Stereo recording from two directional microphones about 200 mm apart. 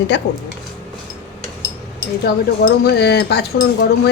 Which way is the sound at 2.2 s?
55° left (ahead or behind).